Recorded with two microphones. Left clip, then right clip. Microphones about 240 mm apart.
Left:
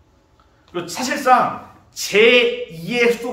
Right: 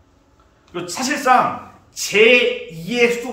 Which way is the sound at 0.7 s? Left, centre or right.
Centre.